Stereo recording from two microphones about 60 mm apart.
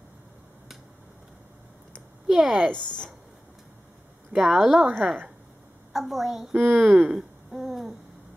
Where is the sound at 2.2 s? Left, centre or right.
Centre.